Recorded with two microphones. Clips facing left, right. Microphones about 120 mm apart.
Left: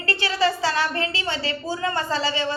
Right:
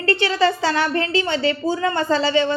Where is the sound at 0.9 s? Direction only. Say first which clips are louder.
Right 6 dB; 35° right (ahead or behind).